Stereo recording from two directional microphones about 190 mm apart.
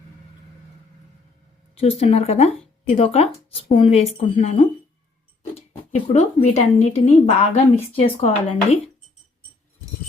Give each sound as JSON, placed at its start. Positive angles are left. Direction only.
{"t": 1.7, "sound": "speech", "side_deg": 30}